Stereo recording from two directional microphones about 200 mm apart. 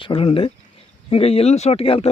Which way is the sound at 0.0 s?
30° left (ahead or behind).